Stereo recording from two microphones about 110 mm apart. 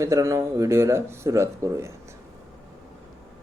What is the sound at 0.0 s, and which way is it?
Speech, 30° right (ahead or behind).